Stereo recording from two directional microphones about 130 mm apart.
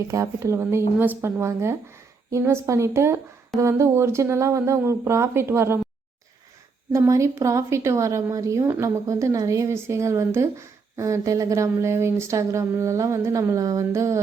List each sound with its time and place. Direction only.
0.1 s a woman's voice: 25° right (ahead or behind)
6.9 s a woman's voice: 25° right (ahead or behind)